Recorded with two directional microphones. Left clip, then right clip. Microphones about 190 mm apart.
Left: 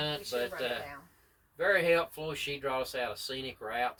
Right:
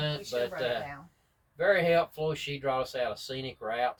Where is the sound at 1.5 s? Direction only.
20° left (ahead or behind).